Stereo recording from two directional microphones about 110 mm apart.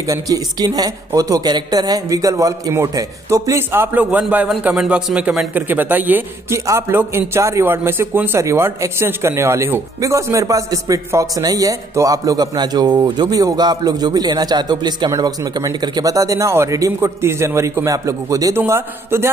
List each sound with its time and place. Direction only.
0.0 s a man's voice: 30° right (ahead or behind); by 6.2 s 15° right (ahead or behind)
6.5 s a man's voice: 30° right (ahead or behind)